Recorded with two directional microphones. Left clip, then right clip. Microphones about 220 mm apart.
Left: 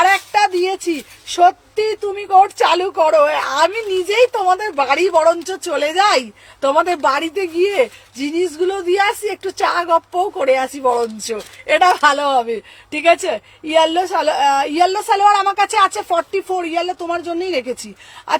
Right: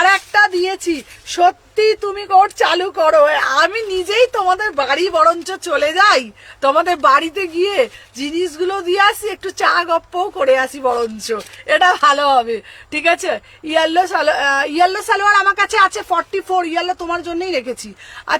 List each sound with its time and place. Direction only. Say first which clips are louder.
0.0 s a woman's voice: right 1 dB; 25° right (ahead or behind)